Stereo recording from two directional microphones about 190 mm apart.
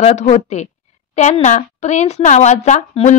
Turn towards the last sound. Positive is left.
turn(degrees=40)  # may be behind; listen again after turning